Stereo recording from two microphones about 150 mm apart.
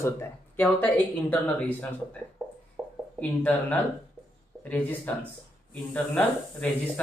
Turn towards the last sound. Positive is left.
turn(degrees=10)  # may be behind; listen again after turning